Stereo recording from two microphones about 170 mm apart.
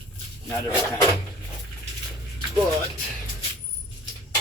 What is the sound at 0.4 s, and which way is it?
Speech, 15° left (ahead or behind).